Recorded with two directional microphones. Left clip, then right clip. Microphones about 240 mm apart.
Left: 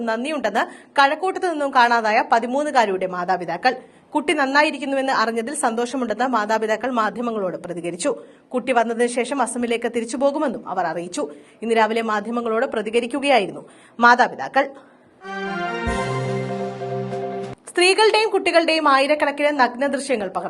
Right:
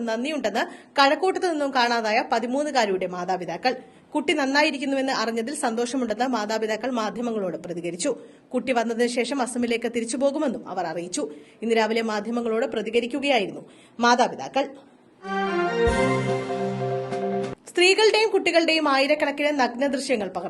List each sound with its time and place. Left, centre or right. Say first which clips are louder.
0.0 s a woman's voice: left 3 dB; centre
15.9 s music: right 1 dB; centre